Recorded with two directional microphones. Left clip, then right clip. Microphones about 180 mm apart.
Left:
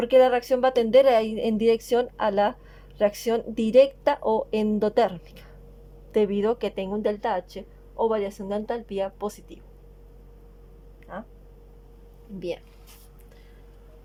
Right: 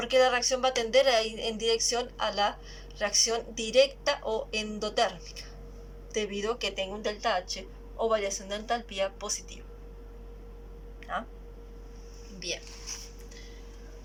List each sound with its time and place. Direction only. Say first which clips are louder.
0.0 s a woman's voice: left 6 dB; 80° left